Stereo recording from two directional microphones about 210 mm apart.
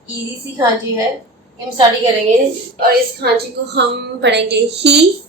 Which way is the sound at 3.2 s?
55° right (ahead or behind).